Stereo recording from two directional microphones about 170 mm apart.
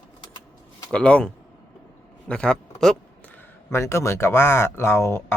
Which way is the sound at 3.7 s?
15° left (ahead or behind).